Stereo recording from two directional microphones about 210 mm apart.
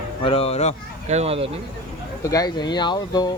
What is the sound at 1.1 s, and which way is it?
Speech, 30° right (ahead or behind).